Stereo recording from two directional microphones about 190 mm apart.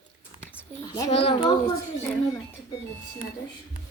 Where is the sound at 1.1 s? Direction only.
30° left (ahead or behind).